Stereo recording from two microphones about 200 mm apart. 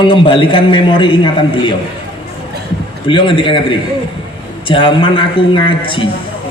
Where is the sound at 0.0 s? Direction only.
25° left (ahead or behind).